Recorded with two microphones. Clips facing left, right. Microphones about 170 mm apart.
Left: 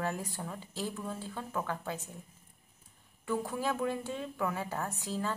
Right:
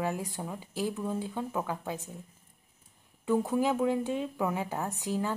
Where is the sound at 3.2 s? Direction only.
20° right (ahead or behind).